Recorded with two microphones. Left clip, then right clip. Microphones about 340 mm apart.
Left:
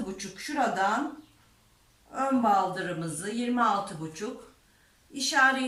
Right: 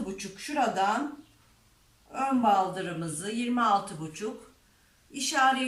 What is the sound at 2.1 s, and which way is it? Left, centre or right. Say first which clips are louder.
A woman's voice: even; centre.